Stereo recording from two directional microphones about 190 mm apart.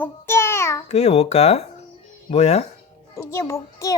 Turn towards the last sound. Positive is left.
turn(degrees=15)  # may be behind; listen again after turning